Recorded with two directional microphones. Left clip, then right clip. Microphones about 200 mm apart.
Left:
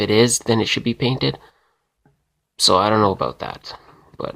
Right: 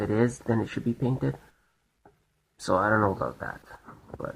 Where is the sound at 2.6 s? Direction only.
25° left (ahead or behind).